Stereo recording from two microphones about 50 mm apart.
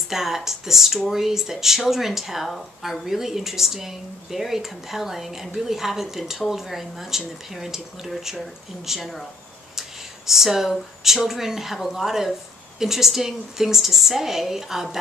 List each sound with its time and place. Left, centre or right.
0.1 s speech: centre
9.8 s a sound: centre
11.1 s speech: centre